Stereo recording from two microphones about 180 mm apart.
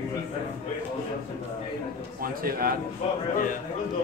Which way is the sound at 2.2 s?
55° right (ahead or behind).